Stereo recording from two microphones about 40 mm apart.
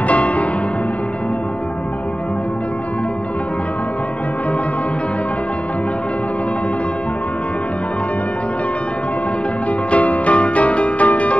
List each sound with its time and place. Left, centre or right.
0.1 s music: left
9.8 s music: left